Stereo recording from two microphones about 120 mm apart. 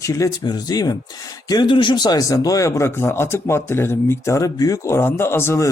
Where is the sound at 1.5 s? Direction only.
40° left (ahead or behind).